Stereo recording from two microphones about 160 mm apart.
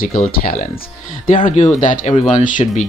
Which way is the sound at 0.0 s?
65° left (ahead or behind).